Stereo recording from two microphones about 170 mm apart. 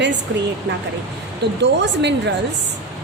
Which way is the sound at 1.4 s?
85° right.